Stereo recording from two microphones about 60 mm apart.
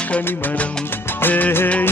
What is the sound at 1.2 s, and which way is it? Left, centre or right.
Music, left.